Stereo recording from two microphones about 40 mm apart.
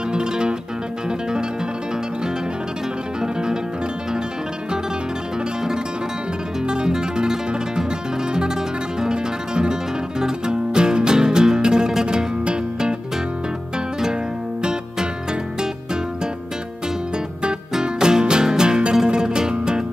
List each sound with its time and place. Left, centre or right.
0.1 s music: right
6.7 s music: centre
14.6 s music: centre
17.4 s music: right